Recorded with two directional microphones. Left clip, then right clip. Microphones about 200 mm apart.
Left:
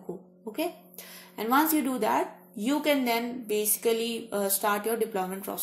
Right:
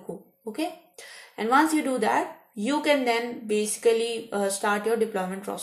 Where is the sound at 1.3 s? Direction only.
35° left (ahead or behind).